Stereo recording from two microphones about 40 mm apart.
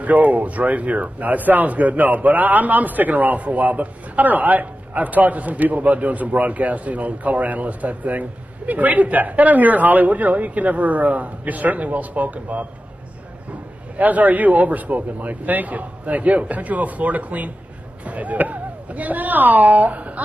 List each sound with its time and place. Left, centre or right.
0.0 s a man's voice: right
13.9 s a man's voice: right